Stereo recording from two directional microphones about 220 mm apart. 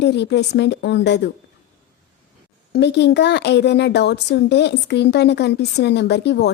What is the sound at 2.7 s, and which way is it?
Speech, 50° left (ahead or behind).